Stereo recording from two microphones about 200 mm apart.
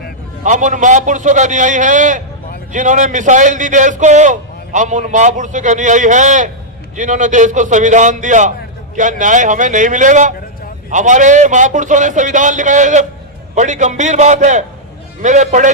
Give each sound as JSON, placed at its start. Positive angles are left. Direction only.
{"t": 0.4, "sound": "a man's voice", "side_deg": -40}